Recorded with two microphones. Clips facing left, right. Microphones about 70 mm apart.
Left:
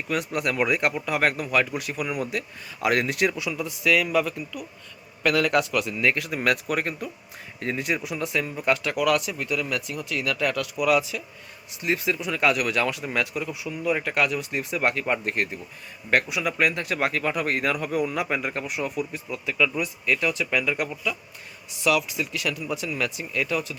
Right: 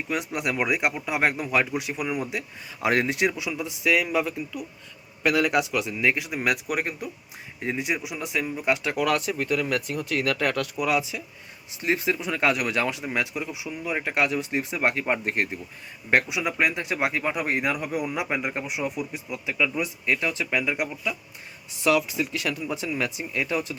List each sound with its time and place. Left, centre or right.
0.1 s a man's voice: centre